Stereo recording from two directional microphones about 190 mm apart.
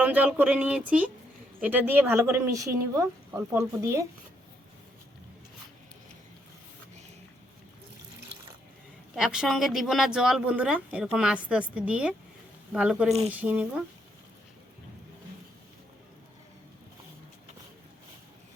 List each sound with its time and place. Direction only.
0.0 s speech: 10° right (ahead or behind)
9.1 s speech: 5° right (ahead or behind)